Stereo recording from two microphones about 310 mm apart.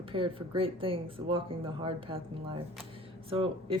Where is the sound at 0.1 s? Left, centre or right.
Centre.